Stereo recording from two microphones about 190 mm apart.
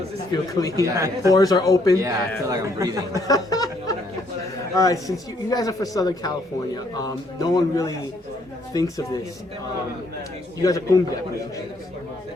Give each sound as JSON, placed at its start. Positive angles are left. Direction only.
{"t": 0.5, "sound": "a man's voice", "side_deg": 20}
{"t": 0.9, "sound": "a man's voice", "side_deg": -15}
{"t": 1.3, "sound": "a man's voice", "side_deg": 20}
{"t": 2.0, "sound": "a man's voice", "side_deg": -15}
{"t": 3.2, "sound": "a sound", "side_deg": 20}
{"t": 4.7, "sound": "a man's voice", "side_deg": 15}
{"t": 10.6, "sound": "a man's voice", "side_deg": 20}